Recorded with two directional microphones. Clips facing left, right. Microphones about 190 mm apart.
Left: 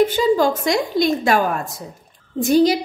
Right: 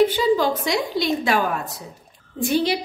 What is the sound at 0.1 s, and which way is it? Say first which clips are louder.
A woman's voice: left 3 dB; 45° left (ahead or behind).